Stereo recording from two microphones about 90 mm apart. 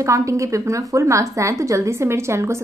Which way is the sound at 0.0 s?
35° right (ahead or behind).